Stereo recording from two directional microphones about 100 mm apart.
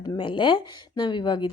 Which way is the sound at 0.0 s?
45° left (ahead or behind).